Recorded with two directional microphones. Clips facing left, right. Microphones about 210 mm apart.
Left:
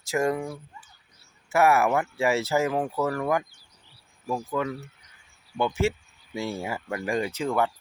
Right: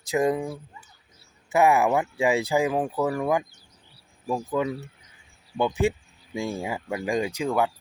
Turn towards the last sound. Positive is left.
turn(degrees=-10)  # may be behind; listen again after turning